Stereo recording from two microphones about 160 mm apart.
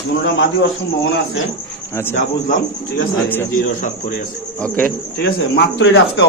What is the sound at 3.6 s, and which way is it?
Speech, 60° left (ahead or behind).